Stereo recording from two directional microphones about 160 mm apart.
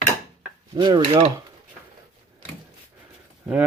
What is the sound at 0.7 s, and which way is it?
Speech, 30° right (ahead or behind).